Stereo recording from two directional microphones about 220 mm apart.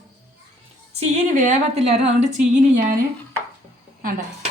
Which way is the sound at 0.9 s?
30° right (ahead or behind).